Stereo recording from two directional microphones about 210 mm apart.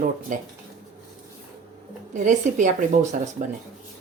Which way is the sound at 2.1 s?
35° right (ahead or behind).